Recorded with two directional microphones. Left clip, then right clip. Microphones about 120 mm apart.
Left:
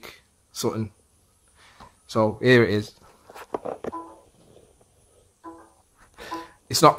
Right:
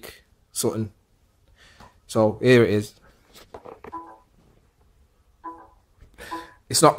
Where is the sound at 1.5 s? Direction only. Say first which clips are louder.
Left 1 dB; 10° right (ahead or behind).